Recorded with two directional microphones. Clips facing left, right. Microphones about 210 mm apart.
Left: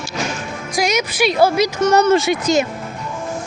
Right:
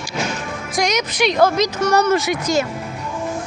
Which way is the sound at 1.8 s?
25° left (ahead or behind).